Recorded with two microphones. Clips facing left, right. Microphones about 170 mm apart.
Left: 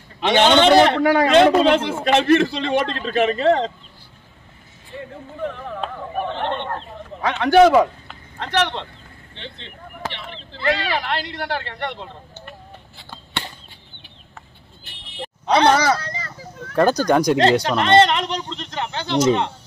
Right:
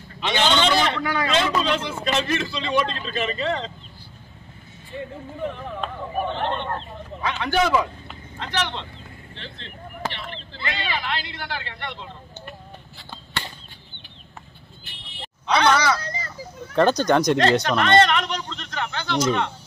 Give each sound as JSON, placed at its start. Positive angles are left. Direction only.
{"t": 0.2, "sound": "a man's voice", "side_deg": 60}
{"t": 7.2, "sound": "a man's voice", "side_deg": 55}
{"t": 10.6, "sound": "a woman's voice", "side_deg": 40}
{"t": 11.1, "sound": "a man's voice", "side_deg": 65}
{"t": 15.4, "sound": "a woman's voice", "side_deg": 40}
{"t": 16.7, "sound": "speech", "side_deg": 10}
{"t": 17.4, "sound": "speech", "side_deg": 30}